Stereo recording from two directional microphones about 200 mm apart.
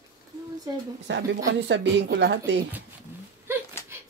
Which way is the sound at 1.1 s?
65° right (ahead or behind).